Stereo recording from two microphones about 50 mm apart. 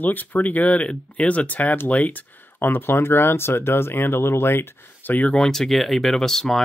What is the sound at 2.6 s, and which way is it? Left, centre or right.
Speech, left.